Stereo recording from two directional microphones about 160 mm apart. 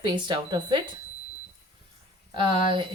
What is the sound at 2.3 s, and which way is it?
Speech, 30° right (ahead or behind).